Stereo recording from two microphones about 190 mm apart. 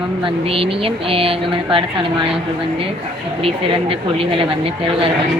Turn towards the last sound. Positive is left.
turn(degrees=-30)  # may be behind; listen again after turning